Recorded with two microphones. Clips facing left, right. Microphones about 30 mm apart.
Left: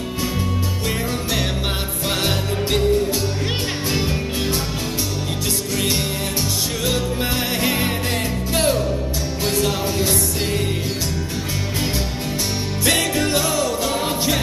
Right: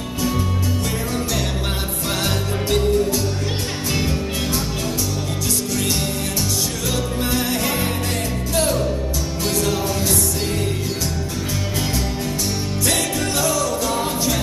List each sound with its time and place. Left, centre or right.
2.0 s music: centre
3.9 s music: centre
6.9 s music: left
9.4 s music: left
12.8 s music: left